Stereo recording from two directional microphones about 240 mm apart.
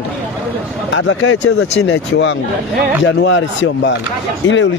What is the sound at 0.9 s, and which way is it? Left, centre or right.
A man's voice, left.